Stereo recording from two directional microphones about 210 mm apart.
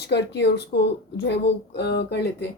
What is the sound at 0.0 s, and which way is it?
Speech, 55° left (ahead or behind).